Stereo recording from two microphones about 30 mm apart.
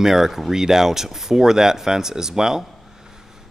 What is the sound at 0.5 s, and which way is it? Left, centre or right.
Speech, centre.